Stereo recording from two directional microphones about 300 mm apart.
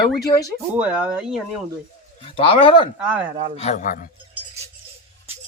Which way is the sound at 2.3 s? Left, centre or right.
Centre.